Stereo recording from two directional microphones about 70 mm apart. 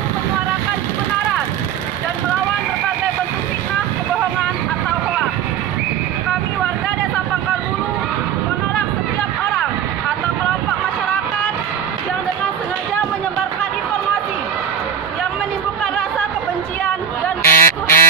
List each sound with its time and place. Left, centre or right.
17.5 s fowl: left